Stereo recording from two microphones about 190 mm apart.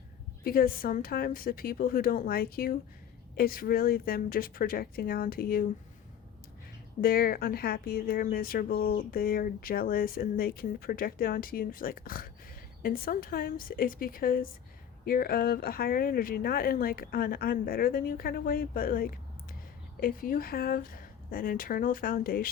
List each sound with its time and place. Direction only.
0.4 s speech: 50° left (ahead or behind)
7.0 s speech: 50° left (ahead or behind)